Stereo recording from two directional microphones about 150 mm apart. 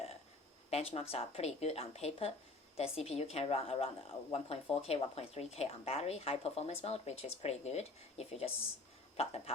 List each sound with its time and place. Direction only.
0.7 s a woman's voice: 40° left (ahead or behind)